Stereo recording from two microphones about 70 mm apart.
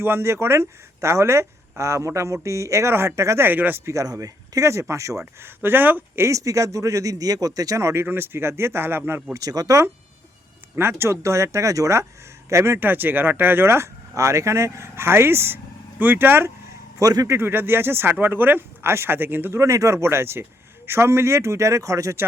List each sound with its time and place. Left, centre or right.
0.0 s speech: right
3.4 s speech: right
3.8 s speech: right
5.4 s speech: right
6.2 s speech: right
8.0 s speech: right
9.3 s speech: right
10.8 s speech: right
17.0 s speech: right
17.3 s speech: right